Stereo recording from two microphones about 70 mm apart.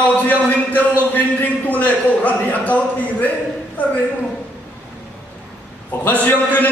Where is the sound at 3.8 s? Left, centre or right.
Left.